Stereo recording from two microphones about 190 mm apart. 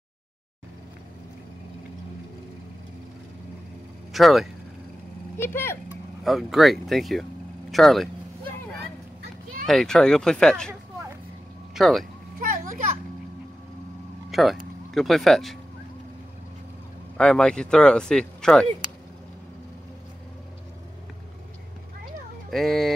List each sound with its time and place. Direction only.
4.1 s speech: centre (ahead or behind)
5.4 s speech: 10° left (ahead or behind)
6.2 s speech: centre (ahead or behind)
7.7 s vehicle: centre (ahead or behind)
9.7 s speech: 5° left (ahead or behind)
11.7 s speech: centre (ahead or behind)
12.4 s children playing: 45° right (ahead or behind)
14.3 s speech: centre (ahead or behind)
17.2 s speech: 5° left (ahead or behind)
22.5 s speech: centre (ahead or behind)